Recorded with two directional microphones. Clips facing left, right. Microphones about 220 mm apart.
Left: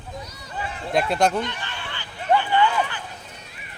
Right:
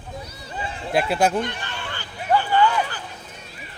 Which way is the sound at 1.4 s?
50° right (ahead or behind).